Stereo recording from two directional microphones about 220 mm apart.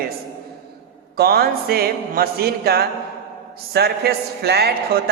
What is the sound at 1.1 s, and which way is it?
A man's voice, 45° right (ahead or behind).